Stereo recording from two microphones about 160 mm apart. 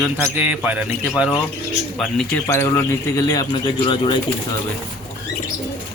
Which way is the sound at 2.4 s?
20° left (ahead or behind).